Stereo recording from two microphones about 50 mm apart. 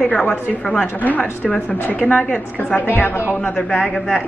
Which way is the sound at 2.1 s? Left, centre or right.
Left.